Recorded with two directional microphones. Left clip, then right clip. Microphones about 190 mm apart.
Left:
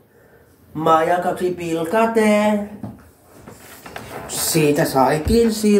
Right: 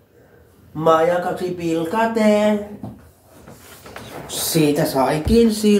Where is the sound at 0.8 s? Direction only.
30° left (ahead or behind).